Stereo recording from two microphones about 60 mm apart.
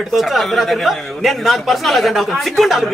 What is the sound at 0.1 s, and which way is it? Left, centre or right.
A man's voice, centre.